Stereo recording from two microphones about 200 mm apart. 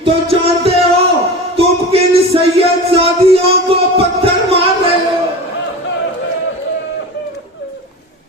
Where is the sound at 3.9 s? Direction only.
30° right (ahead or behind).